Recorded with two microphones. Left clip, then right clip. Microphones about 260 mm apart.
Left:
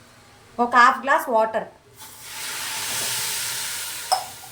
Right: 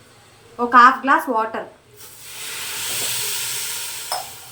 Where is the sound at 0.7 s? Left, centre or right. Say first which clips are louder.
Right 4 dB; left.